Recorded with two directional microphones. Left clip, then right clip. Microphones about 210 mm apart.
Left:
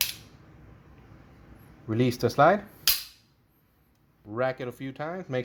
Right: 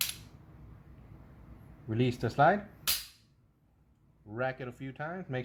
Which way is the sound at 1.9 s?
35° left (ahead or behind).